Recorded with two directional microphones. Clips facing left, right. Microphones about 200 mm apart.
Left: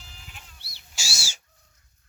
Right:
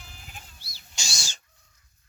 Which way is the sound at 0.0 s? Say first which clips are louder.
Right 2 dB; 50° right (ahead or behind).